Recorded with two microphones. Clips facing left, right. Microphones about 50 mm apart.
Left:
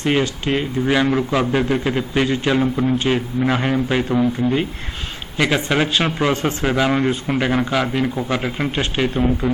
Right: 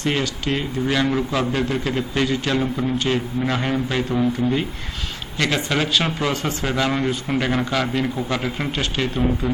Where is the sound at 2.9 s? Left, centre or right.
Left.